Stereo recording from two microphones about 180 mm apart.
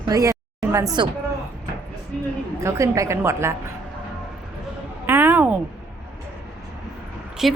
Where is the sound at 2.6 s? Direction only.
15° right (ahead or behind).